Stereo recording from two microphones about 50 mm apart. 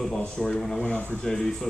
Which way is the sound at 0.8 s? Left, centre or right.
Left.